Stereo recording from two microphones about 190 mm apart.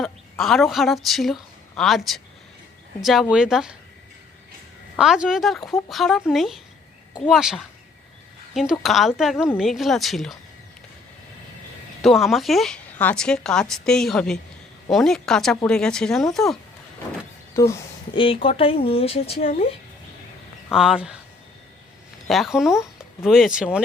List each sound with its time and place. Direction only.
0.0 s a woman's voice: centre (ahead or behind)
4.9 s a woman's voice: 5° right (ahead or behind)
8.7 s a woman's voice: centre (ahead or behind)
12.0 s a woman's voice: centre (ahead or behind)
17.5 s speech: 15° left (ahead or behind)
18.1 s speech: 25° left (ahead or behind)
20.7 s a woman's voice: 5° right (ahead or behind)
22.3 s speech: centre (ahead or behind)